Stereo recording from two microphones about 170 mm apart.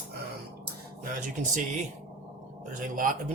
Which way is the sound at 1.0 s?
50° right (ahead or behind).